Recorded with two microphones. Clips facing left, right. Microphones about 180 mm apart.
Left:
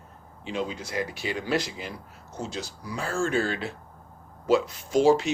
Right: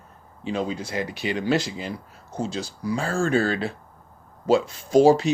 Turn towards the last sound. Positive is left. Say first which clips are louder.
# right 4 dB
turn(degrees=-35)  # may be behind; listen again after turning